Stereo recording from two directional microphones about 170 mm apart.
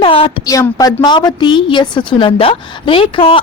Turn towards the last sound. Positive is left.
turn(degrees=30)  # may be behind; listen again after turning